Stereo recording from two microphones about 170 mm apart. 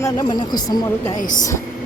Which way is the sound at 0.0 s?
25° left (ahead or behind).